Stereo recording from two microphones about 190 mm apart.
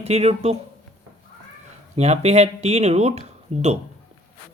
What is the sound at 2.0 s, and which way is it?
Speech, 35° right (ahead or behind).